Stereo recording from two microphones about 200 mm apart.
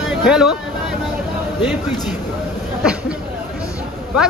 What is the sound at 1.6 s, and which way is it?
Speech, centre (ahead or behind).